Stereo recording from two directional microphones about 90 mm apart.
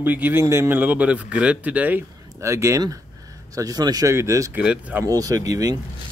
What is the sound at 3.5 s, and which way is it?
Speech, 45° right (ahead or behind).